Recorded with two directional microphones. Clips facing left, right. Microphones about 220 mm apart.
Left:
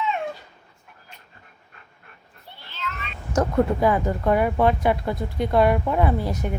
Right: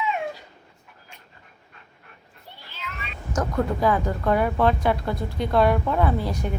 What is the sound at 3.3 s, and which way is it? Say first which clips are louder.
Speech: left 4 dB; 20° left (ahead or behind).